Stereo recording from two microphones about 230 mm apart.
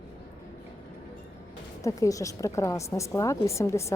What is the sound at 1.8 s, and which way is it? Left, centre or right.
A woman's voice, centre.